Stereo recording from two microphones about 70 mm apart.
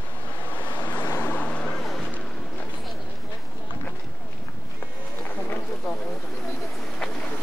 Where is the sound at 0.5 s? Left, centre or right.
Left.